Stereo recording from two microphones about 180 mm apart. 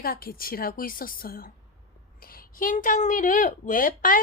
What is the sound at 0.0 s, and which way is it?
A woman's voice, 55° left (ahead or behind).